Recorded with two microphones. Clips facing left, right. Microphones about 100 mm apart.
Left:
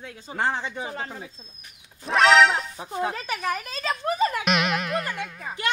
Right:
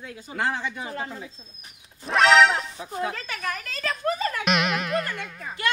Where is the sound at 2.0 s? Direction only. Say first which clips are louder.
Even; centre (ahead or behind).